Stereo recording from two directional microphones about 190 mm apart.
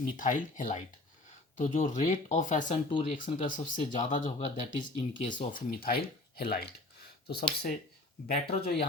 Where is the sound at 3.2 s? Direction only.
30° left (ahead or behind).